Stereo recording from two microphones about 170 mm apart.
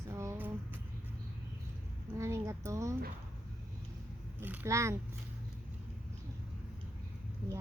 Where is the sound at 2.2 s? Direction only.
15° right (ahead or behind).